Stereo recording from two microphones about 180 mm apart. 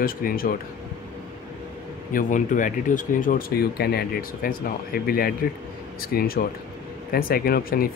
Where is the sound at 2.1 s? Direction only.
45° left (ahead or behind).